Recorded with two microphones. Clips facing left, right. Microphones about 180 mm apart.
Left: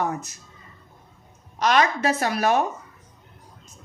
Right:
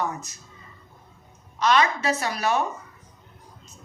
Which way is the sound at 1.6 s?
45° left (ahead or behind).